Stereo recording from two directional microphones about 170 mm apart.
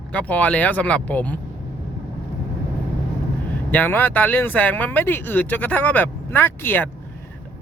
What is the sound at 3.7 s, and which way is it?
Speech, 10° left (ahead or behind).